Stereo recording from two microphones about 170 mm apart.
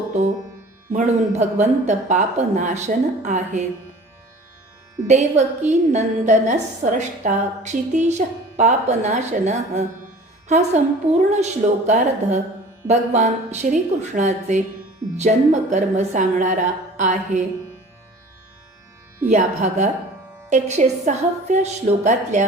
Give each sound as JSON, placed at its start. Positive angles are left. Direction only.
{"t": 0.9, "sound": "a woman's voice", "side_deg": -40}
{"t": 5.0, "sound": "a woman's voice", "side_deg": -40}
{"t": 19.3, "sound": "a woman's voice", "side_deg": -45}